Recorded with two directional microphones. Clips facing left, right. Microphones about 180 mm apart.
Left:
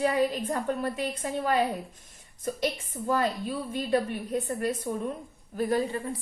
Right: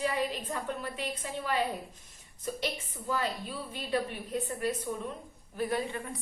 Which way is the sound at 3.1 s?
50° left (ahead or behind).